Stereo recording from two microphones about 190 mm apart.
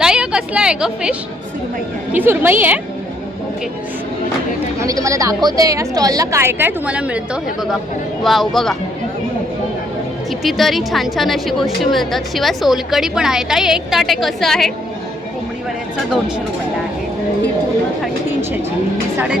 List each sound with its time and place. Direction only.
0.0 s a sound: 5° right (ahead or behind)
2.1 s a woman's voice: 10° right (ahead or behind)
4.8 s a woman's voice: 15° right (ahead or behind)
8.2 s a woman's voice: centre (ahead or behind)
10.4 s a woman's voice: centre (ahead or behind)